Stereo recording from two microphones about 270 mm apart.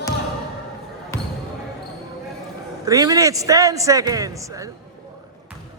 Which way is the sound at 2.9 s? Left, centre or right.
Centre.